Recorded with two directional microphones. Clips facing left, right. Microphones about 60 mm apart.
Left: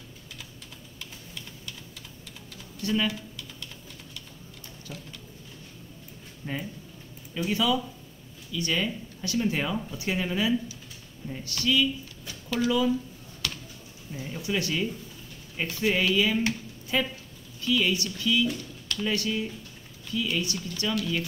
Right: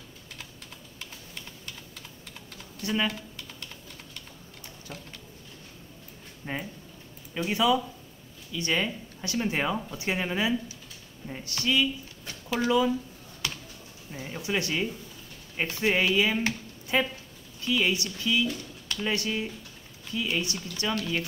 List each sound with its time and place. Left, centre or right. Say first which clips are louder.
2.8 s speech: left 1 dB; right
3.1 s typing: left 2 dB; right
6.4 s speech: even; right
12.3 s a sound: right 1 dB; right
12.6 s speech: right 1 dB; right
14.1 s speech: even; right